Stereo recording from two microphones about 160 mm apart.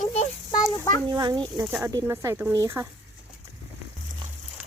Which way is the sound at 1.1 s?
25° right (ahead or behind).